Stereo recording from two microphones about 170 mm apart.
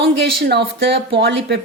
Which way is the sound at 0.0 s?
65° right (ahead or behind).